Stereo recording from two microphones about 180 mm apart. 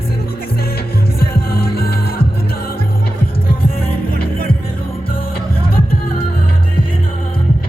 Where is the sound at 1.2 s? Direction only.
55° left (ahead or behind).